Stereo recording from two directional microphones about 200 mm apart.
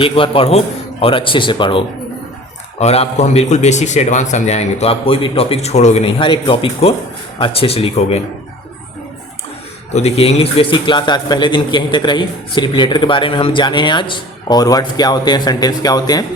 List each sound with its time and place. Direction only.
0.0 s a man's voice: 25° left (ahead or behind)
9.9 s a man's voice: 30° left (ahead or behind)